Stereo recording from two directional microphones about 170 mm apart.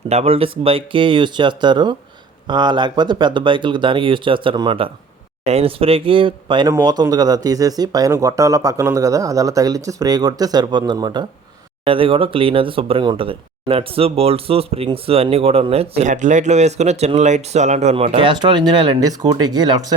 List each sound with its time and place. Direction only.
0.1 s speech: 40° right (ahead or behind)
18.2 s speech: 30° right (ahead or behind)